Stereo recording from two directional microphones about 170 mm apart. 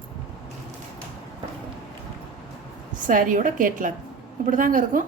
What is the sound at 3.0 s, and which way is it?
A woman's voice, 50° right (ahead or behind).